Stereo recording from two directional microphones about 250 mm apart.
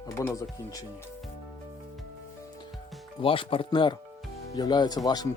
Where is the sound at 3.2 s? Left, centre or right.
Left.